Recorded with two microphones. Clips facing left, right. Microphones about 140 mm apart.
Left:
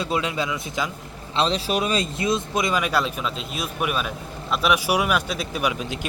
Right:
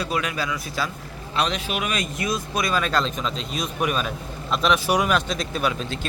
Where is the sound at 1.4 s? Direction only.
30° left (ahead or behind).